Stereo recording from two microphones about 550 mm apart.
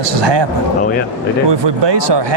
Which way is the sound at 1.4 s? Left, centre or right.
Right.